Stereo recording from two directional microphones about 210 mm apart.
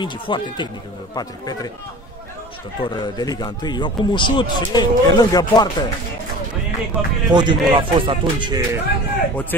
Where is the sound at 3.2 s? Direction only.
20° left (ahead or behind).